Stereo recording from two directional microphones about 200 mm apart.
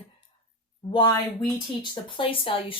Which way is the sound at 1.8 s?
25° left (ahead or behind).